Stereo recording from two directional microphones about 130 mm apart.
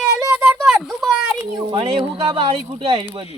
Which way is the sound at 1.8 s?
45° right (ahead or behind).